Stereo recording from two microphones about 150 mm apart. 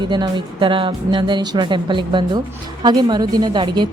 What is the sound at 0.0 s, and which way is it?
A woman's voice, 30° right (ahead or behind).